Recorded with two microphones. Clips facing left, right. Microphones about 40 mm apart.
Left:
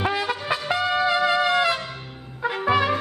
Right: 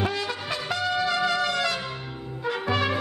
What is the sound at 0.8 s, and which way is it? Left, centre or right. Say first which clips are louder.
Trumpet: left 3 dB; left.